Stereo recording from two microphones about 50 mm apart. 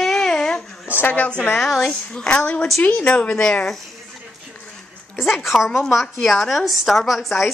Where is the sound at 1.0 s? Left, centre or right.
Left.